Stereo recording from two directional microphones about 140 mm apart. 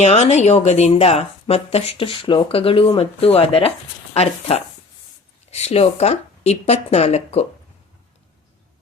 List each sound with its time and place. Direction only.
0.0 s speech: 55° left (ahead or behind)